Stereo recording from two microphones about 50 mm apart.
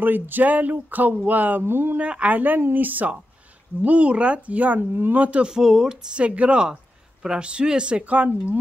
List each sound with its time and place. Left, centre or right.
0.0 s speech: right
1.6 s speech: right
2.0 s speech: right
4.9 s speech: right
5.2 s speech: right
5.5 s speech: centre
6.1 s speech: right